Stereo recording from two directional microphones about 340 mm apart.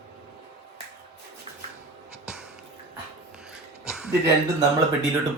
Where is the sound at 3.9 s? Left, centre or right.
Centre.